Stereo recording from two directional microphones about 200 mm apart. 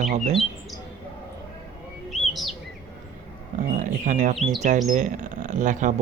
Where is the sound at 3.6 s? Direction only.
40° right (ahead or behind).